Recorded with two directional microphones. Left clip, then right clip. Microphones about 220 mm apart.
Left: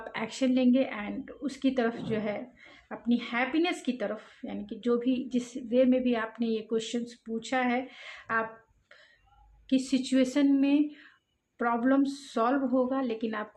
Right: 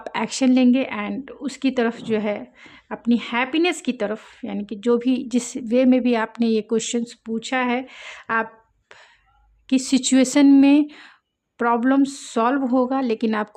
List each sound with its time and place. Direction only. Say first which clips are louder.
0.0 s speech: right 9 dB; 45° right (ahead or behind)
9.6 s speech: right 8 dB; 45° right (ahead or behind)